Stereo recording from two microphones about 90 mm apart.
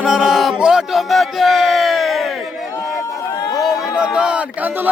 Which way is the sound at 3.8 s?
5° right (ahead or behind).